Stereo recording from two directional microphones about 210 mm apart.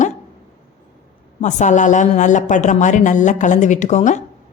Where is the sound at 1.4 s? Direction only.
35° left (ahead or behind).